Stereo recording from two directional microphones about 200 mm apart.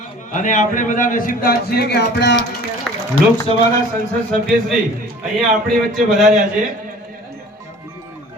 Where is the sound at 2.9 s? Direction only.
Centre (ahead or behind).